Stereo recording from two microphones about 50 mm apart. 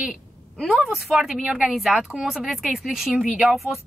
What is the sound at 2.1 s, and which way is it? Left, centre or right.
Speech, right.